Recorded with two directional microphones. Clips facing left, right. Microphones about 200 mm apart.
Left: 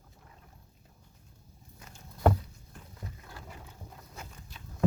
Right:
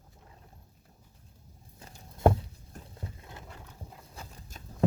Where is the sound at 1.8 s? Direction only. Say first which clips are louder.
Right 2 dB; 25° right (ahead or behind).